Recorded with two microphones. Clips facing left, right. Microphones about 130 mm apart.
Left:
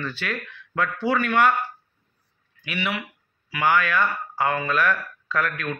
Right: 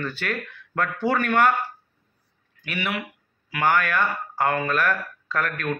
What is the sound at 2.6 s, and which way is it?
Speech, 45° right (ahead or behind).